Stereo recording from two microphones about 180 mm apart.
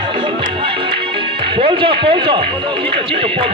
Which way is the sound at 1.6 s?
30° right (ahead or behind).